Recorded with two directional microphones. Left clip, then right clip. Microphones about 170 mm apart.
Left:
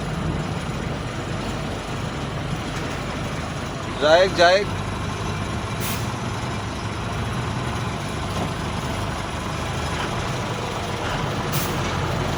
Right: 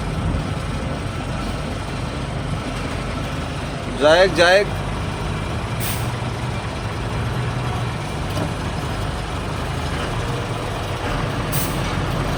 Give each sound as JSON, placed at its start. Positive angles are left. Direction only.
{"t": 4.0, "sound": "speech", "side_deg": -55}